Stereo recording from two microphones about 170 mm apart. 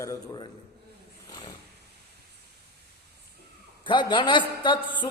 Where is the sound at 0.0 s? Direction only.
20° left (ahead or behind).